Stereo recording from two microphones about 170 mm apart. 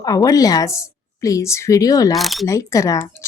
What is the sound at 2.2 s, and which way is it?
Speech, centre (ahead or behind).